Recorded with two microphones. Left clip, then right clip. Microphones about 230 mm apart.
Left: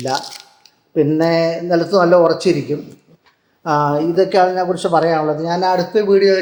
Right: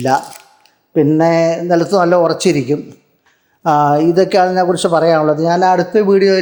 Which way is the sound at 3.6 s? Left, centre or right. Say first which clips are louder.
Right 5 dB; right.